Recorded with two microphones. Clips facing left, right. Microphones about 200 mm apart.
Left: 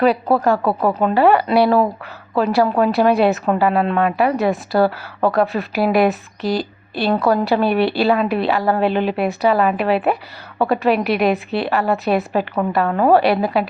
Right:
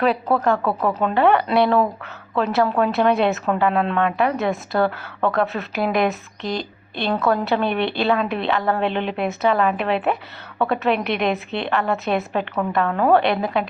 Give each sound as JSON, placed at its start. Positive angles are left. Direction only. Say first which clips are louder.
{"t": 0.5, "sound": "speech", "louder": "left 3 dB", "side_deg": 30}
{"t": 0.9, "sound": "a woman's voice", "louder": "left 3 dB", "side_deg": 5}
{"t": 2.8, "sound": "a woman's voice", "louder": "left 4 dB", "side_deg": 0}